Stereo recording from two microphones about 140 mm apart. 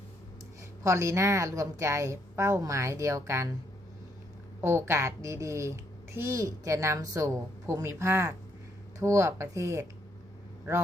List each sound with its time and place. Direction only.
0.9 s a woman's voice: 20° right (ahead or behind)
4.6 s a woman's voice: 20° right (ahead or behind)